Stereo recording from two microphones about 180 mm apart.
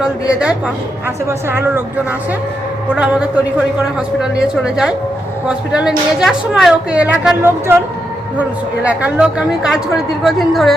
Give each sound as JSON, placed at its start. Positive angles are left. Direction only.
{"t": 0.0, "sound": "a woman's voice", "side_deg": -5}
{"t": 2.9, "sound": "a woman's voice", "side_deg": -5}